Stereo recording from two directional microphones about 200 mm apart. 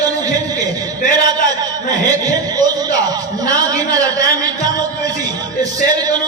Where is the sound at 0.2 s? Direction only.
20° right (ahead or behind).